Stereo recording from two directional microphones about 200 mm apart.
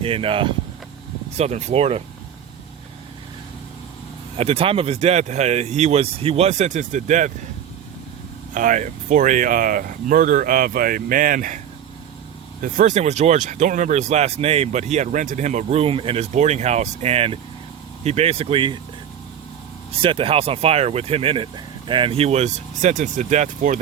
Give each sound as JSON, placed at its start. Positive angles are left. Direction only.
{"t": 0.0, "sound": "speech", "side_deg": -25}
{"t": 4.4, "sound": "speech", "side_deg": -30}
{"t": 8.5, "sound": "speech", "side_deg": -40}
{"t": 12.6, "sound": "speech", "side_deg": -40}
{"t": 20.0, "sound": "speech", "side_deg": -25}